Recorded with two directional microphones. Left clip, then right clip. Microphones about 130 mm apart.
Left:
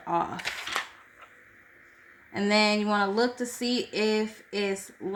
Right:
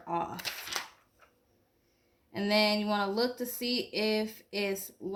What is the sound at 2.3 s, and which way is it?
Speech, 25° left (ahead or behind).